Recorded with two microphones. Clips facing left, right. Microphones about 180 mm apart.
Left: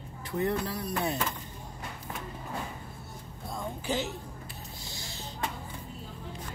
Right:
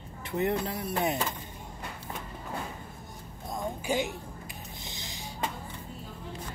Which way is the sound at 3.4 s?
15° right (ahead or behind).